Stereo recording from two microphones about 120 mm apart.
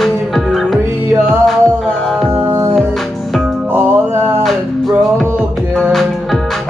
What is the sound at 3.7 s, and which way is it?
Music, 20° right (ahead or behind).